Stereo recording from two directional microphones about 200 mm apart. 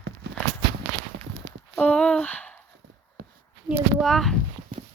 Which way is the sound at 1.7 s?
5° left (ahead or behind).